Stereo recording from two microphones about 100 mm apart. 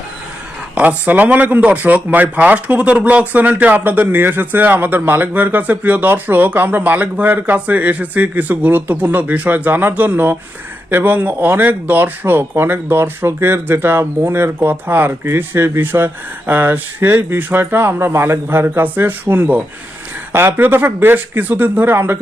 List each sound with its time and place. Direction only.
0.8 s a man's voice: 15° right (ahead or behind)